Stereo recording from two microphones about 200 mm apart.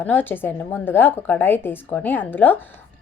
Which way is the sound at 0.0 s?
10° left (ahead or behind).